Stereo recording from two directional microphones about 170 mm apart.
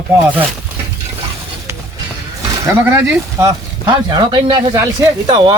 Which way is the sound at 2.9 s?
15° right (ahead or behind).